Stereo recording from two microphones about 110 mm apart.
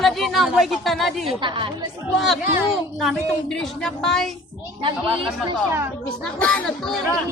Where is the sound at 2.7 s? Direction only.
Centre (ahead or behind).